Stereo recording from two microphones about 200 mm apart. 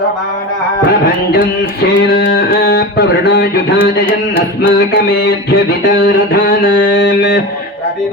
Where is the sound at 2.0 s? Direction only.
55° left (ahead or behind).